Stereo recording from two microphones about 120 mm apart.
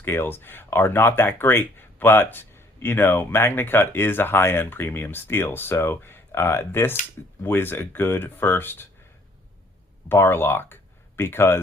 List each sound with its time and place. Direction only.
0.0 s speech: 20° left (ahead or behind)
10.1 s speech: 20° left (ahead or behind)